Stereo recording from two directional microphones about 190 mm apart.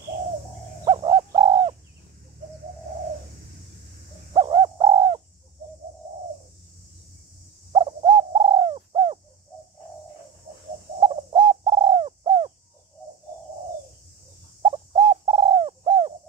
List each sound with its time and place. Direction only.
0.8 s bird: 25° right (ahead or behind)
4.3 s bird: 25° right (ahead or behind)
7.7 s bird: 25° right (ahead or behind)
11.0 s bird: 25° right (ahead or behind)
14.6 s bird: 25° right (ahead or behind)